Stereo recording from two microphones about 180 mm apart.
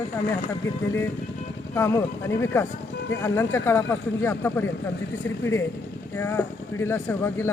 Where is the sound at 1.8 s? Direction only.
15° left (ahead or behind).